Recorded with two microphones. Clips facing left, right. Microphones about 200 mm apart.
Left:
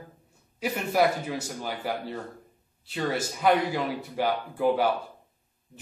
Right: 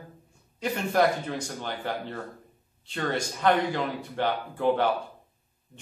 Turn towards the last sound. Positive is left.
turn(degrees=5)  # may be behind; listen again after turning